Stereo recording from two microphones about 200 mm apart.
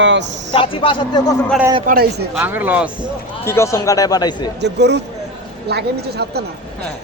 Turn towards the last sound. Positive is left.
turn(degrees=-55)  # may be behind; listen again after turning